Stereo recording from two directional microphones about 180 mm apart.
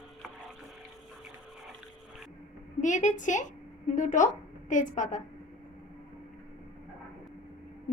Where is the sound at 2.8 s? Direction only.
45° left (ahead or behind).